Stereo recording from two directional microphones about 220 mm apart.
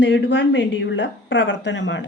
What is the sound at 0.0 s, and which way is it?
A woman's voice, 50° left (ahead or behind).